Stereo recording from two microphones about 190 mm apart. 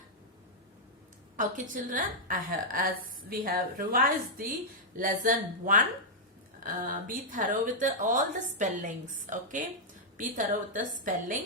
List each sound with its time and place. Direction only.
1.7 s speech: 45° right (ahead or behind)